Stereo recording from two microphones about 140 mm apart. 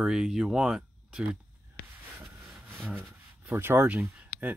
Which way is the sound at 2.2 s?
10° right (ahead or behind).